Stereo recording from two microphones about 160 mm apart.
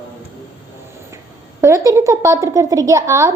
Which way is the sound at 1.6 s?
20° right (ahead or behind).